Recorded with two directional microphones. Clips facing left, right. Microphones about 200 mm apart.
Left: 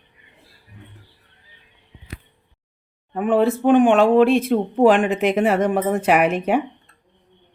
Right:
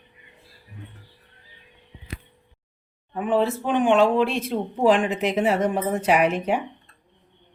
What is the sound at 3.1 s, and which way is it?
Speech, 50° left (ahead or behind).